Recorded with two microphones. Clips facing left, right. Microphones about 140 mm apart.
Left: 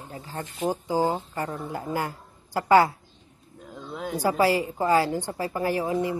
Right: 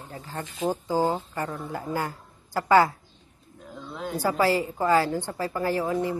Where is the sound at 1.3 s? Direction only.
40° left (ahead or behind).